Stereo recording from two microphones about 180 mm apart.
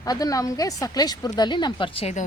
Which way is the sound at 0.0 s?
20° left (ahead or behind).